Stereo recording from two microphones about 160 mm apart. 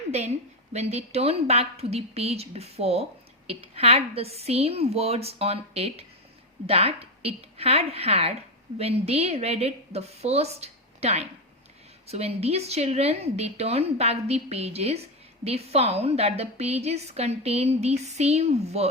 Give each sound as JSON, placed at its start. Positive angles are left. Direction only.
{"t": 0.7, "sound": "a woman's voice", "side_deg": -40}